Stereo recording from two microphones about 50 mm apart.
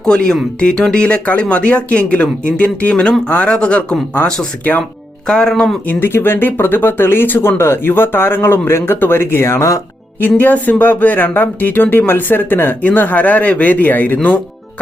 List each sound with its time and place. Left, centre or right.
0.0 s speech: centre
5.9 s speech: left
10.2 s speech: left
12.8 s speech: left